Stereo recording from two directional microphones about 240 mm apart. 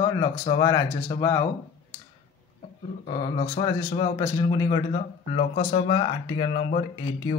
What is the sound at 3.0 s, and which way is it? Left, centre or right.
A man's voice, centre.